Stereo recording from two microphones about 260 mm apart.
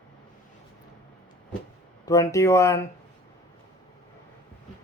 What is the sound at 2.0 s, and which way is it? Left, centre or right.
Speech, centre.